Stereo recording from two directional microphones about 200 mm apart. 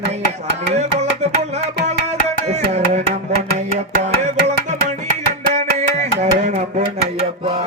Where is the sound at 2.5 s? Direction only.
35° right (ahead or behind).